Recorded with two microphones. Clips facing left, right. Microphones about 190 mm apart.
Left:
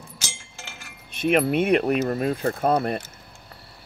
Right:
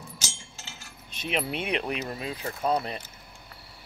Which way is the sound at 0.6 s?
55° left (ahead or behind).